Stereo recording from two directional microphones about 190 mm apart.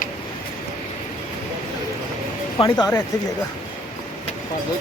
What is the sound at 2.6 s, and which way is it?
Speech, 30° left (ahead or behind).